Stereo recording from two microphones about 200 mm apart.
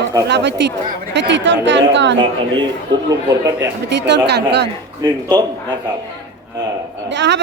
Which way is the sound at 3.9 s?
60° right (ahead or behind).